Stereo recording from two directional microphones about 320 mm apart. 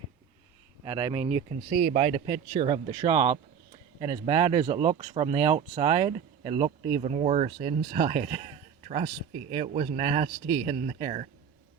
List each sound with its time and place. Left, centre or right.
0.9 s speech: centre